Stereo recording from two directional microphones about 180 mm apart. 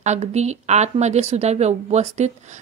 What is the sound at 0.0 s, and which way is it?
A woman's voice, 40° right (ahead or behind).